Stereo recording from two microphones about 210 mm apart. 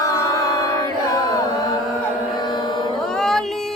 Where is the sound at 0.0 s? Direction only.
15° left (ahead or behind).